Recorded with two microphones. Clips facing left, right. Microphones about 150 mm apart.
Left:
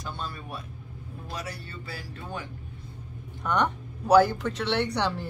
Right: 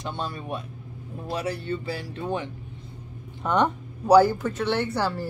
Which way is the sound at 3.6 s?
10° right (ahead or behind).